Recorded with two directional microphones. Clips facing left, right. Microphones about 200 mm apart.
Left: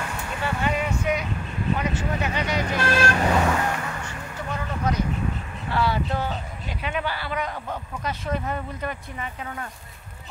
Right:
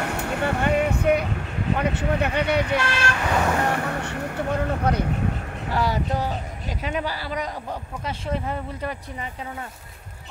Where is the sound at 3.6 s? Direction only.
60° right (ahead or behind).